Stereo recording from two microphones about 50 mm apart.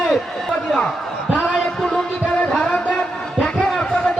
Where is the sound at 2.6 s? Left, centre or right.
Left.